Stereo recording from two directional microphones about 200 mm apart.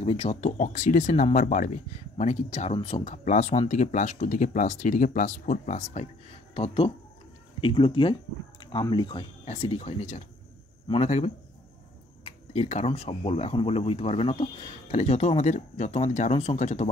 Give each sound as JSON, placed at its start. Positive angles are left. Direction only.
{"t": 0.0, "sound": "speech", "side_deg": 30}